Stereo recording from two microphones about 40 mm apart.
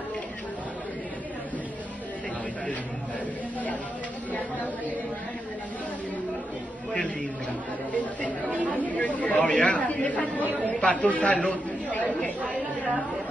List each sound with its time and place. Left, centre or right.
7.9 s speech: left